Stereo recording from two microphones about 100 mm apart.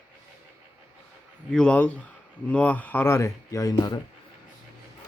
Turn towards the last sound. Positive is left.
turn(degrees=40)  # may be behind; listen again after turning